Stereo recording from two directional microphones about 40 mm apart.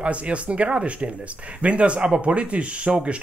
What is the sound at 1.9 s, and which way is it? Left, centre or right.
Speech, right.